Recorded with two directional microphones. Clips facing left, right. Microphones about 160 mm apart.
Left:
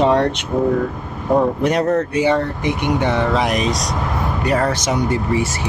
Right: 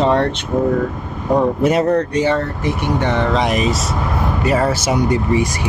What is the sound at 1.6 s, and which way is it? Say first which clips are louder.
Speech: right 2 dB; 5° right (ahead or behind).